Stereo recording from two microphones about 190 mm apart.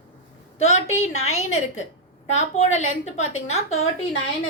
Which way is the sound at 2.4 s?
35° left (ahead or behind).